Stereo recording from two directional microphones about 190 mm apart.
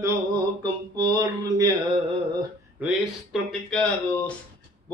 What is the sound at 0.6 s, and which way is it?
Speech, 20° right (ahead or behind).